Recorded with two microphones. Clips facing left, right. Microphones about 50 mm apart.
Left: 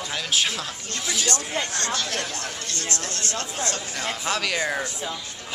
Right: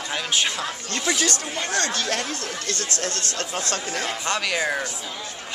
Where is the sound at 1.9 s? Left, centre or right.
Right.